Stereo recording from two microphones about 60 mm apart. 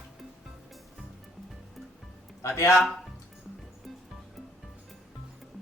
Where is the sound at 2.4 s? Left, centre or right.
Left.